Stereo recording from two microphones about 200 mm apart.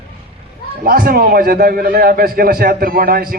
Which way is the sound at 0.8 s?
45° right (ahead or behind).